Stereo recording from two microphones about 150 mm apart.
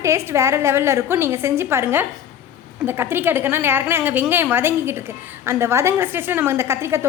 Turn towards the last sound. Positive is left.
turn(degrees=-15)  # may be behind; listen again after turning